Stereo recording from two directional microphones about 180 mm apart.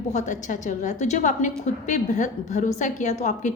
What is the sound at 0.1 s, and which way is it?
A woman's voice, 40° left (ahead or behind).